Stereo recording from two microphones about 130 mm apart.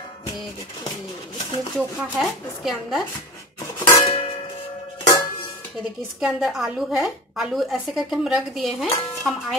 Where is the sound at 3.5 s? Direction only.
40° left (ahead or behind).